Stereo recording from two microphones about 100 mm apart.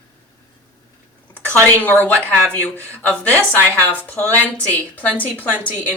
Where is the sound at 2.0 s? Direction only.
15° left (ahead or behind).